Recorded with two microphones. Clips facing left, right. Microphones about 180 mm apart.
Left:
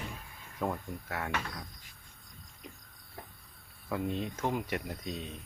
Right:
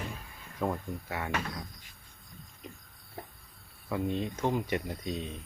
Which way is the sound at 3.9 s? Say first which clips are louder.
Right 2 dB; centre (ahead or behind).